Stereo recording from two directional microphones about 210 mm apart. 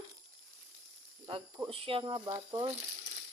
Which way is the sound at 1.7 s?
25° right (ahead or behind).